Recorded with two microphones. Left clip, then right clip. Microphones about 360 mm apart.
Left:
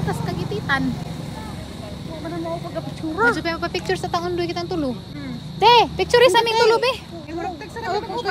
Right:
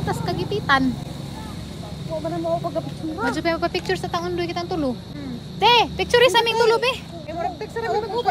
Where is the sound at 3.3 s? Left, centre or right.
Centre.